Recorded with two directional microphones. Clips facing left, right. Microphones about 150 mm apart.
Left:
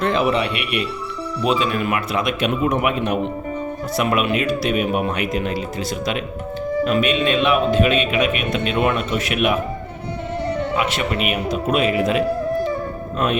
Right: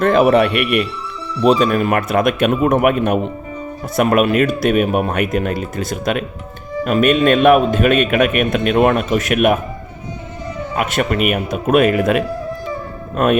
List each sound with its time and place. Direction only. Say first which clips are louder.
0.0 s a man's voice: right 7 dB; 50° right (ahead or behind)
10.8 s a man's voice: right 4 dB; 50° right (ahead or behind)